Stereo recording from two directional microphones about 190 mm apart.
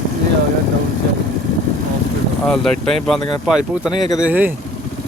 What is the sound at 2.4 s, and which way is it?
Speech, centre (ahead or behind).